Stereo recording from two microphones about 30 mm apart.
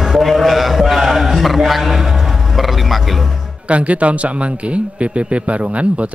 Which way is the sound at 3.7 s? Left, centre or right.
Right.